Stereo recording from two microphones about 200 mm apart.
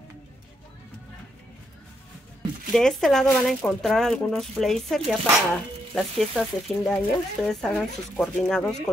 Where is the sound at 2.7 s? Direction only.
Centre (ahead or behind).